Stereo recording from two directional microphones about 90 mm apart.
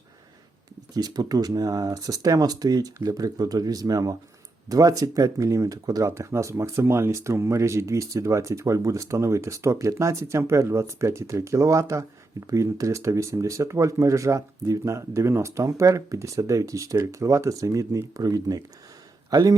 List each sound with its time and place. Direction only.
0.9 s a man's voice: 45° right (ahead or behind)